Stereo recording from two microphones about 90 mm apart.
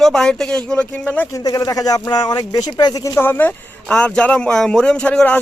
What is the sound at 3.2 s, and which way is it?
Speech, 25° left (ahead or behind).